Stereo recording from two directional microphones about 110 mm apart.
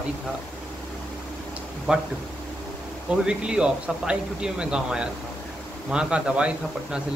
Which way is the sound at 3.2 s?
10° right (ahead or behind).